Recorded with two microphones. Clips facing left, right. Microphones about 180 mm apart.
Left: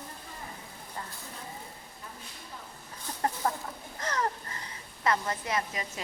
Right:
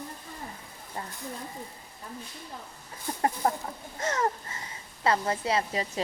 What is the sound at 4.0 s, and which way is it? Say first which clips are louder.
Wheeze: right 3 dB; 25° right (ahead or behind).